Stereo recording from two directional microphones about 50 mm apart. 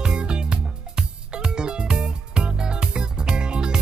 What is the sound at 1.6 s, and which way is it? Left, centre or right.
Music, centre.